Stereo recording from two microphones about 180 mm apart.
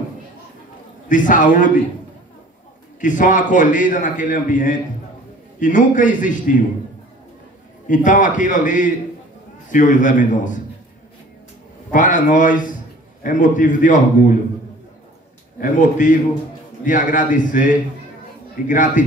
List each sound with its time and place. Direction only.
1.0 s a man's voice: 45° left (ahead or behind)
3.0 s a man's voice: 45° left (ahead or behind)
7.8 s a man's voice: 45° left (ahead or behind)
11.9 s a man's voice: 45° left (ahead or behind)
15.6 s a man's voice: 45° left (ahead or behind)